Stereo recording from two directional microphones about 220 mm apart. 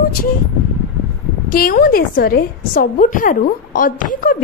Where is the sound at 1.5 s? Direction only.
40° left (ahead or behind).